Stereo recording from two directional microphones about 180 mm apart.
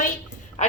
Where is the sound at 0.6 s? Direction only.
40° left (ahead or behind).